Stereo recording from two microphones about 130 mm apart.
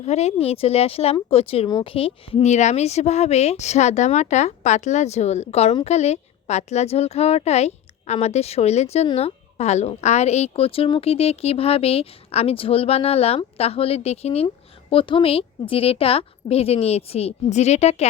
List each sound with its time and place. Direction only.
0.0 s a woman's voice: 55° left (ahead or behind)
14.4 s a woman's voice: 40° left (ahead or behind)